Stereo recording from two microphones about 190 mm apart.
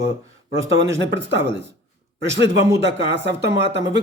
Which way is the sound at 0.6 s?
75° right (ahead or behind).